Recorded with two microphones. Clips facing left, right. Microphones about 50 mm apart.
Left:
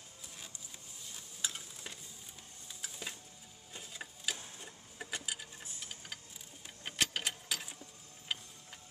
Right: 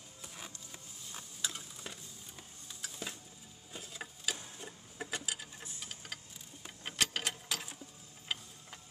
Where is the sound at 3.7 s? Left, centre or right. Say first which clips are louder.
Right 2 dB; centre.